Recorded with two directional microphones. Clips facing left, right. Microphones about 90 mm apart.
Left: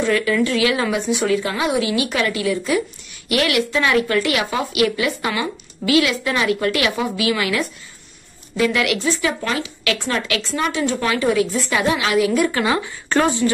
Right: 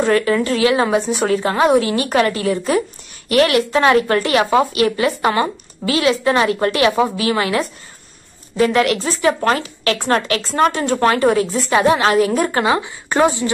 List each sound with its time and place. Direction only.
0.0 s a woman's voice: 40° right (ahead or behind)
12.6 s a woman's voice: 25° right (ahead or behind)